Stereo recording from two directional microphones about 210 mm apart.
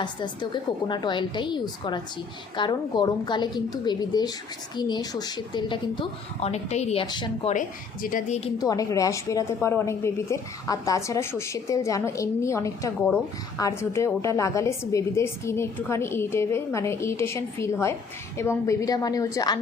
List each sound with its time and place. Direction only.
0.0 s a woman's voice: 20° left (ahead or behind)
8.0 s a woman's voice: 40° left (ahead or behind)
8.5 s a woman's voice: 15° left (ahead or behind)